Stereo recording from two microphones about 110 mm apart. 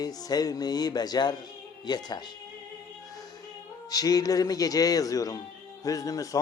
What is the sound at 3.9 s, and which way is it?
A man's voice, 35° left (ahead or behind).